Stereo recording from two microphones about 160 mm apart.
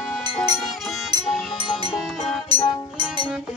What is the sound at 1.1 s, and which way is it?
Music, 25° right (ahead or behind).